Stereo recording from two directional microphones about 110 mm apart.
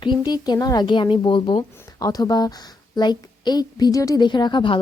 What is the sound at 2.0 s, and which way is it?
A woman's voice, 35° left (ahead or behind).